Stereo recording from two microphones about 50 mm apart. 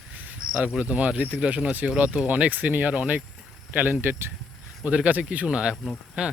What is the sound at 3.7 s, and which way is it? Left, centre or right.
Speech, right.